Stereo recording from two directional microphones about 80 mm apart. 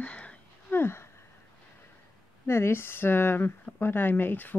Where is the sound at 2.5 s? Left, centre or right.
Left.